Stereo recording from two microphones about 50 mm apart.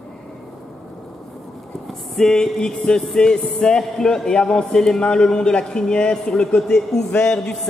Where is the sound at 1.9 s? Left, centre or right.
Centre.